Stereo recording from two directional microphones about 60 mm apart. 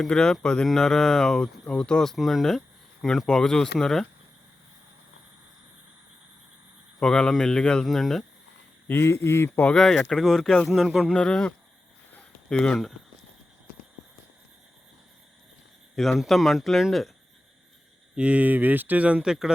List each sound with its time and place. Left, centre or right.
0.0 s speech: centre
2.1 s speech: centre
7.0 s speech: centre
7.9 s speech: centre
9.0 s speech: left
9.7 s speech: centre
10.8 s speech: centre
11.1 s speech: centre
16.0 s speech: centre
18.2 s speech: right
19.2 s speech: centre